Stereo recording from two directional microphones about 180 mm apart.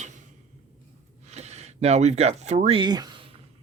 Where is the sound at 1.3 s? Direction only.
35° right (ahead or behind).